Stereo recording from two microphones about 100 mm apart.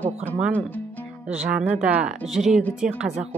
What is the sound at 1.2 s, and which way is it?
Speech, 10° right (ahead or behind).